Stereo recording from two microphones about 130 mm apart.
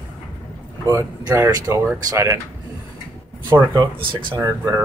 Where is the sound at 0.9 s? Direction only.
25° right (ahead or behind).